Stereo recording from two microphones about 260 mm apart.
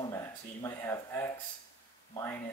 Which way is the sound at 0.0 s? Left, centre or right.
Centre.